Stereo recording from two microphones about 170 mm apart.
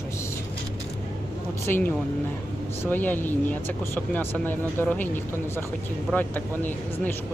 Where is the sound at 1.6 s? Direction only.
10° left (ahead or behind).